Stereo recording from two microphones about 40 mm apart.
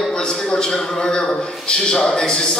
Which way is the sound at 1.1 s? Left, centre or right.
Left.